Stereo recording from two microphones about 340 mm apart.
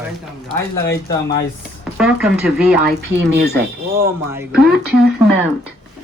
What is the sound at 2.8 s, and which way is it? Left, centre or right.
Speech, right.